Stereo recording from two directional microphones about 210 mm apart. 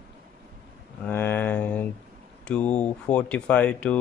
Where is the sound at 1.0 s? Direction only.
10° left (ahead or behind).